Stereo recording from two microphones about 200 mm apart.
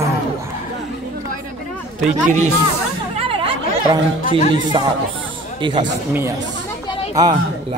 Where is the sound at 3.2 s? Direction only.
25° right (ahead or behind).